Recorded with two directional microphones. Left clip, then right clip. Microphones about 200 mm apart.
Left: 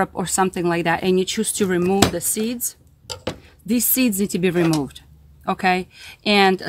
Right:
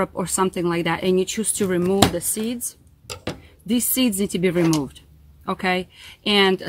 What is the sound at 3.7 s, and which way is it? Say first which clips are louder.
Speech: left 1 dB; 35° left (ahead or behind).